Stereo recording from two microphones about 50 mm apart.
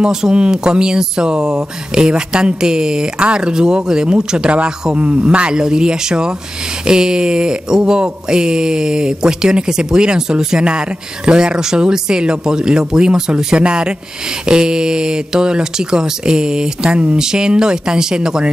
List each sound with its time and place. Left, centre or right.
0.0 s speech: centre